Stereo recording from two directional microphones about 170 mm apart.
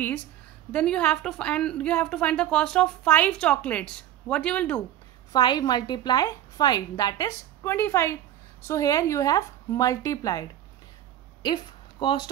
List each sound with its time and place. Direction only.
0.7 s a woman's voice: 5° left (ahead or behind)
5.3 s a woman's voice: 25° left (ahead or behind)
11.4 s speech: 30° left (ahead or behind)